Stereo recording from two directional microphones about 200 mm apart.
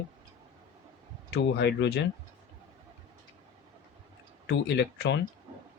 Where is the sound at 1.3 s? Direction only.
60° left (ahead or behind).